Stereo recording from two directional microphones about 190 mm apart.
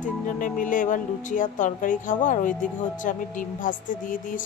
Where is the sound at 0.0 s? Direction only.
45° left (ahead or behind).